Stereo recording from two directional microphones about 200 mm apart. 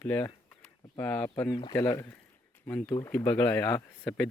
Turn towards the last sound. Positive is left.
turn(degrees=5)  # may be behind; listen again after turning